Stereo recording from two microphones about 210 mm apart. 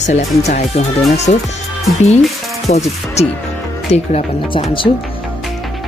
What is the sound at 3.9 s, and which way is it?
Speech, 30° left (ahead or behind).